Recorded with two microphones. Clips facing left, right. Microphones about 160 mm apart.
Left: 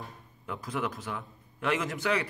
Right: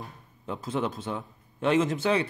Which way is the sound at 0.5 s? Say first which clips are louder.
Right 4 dB; 25° right (ahead or behind).